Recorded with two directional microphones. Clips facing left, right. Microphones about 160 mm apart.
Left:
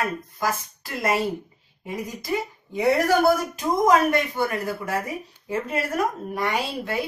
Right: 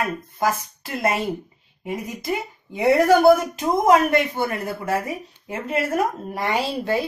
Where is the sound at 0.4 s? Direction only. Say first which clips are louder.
Right 5 dB; 25° right (ahead or behind).